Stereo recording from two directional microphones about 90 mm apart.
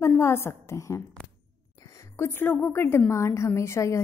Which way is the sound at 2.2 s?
25° left (ahead or behind).